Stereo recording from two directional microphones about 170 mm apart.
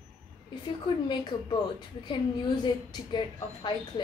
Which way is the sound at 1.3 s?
25° left (ahead or behind).